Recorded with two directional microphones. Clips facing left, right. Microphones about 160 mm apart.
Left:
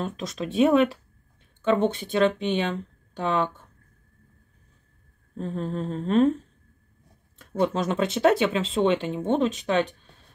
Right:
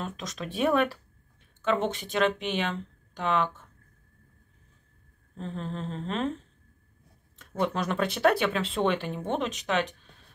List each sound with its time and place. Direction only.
0.0 s speech: 30° left (ahead or behind)
5.4 s speech: 40° left (ahead or behind)
7.6 s speech: 25° left (ahead or behind)